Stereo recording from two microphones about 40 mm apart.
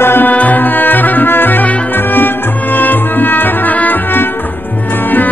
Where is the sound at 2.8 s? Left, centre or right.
Left.